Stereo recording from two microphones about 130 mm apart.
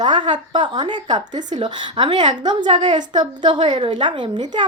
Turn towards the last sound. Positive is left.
turn(degrees=-35)  # may be behind; listen again after turning